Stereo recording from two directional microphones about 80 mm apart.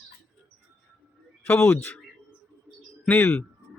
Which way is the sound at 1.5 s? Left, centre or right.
Left.